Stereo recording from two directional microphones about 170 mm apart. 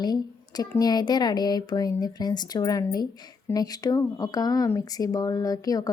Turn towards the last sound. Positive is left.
turn(degrees=20)  # may be behind; listen again after turning